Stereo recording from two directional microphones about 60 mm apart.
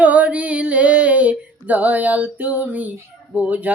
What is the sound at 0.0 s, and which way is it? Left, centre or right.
Music, right.